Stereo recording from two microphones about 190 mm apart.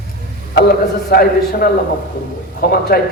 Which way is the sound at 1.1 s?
55° left (ahead or behind).